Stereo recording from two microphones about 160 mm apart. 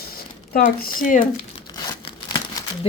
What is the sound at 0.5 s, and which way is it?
Speech, 65° left (ahead or behind).